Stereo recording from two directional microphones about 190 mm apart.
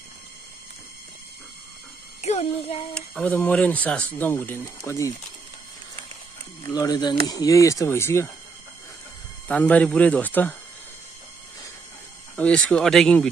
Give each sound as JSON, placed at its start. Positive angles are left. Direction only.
{"t": 2.2, "sound": "a child's voice", "side_deg": 35}
{"t": 2.9, "sound": "speech", "side_deg": 5}
{"t": 6.8, "sound": "speech", "side_deg": 20}
{"t": 9.5, "sound": "speech", "side_deg": 10}
{"t": 12.4, "sound": "speech", "side_deg": 5}